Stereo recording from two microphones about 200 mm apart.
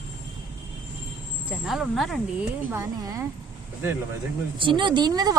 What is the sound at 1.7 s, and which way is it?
Speech, centre (ahead or behind).